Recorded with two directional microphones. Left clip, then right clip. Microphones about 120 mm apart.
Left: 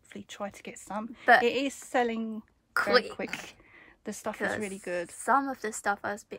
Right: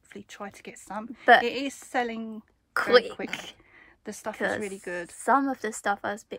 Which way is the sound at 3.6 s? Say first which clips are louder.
Even; 30° left (ahead or behind).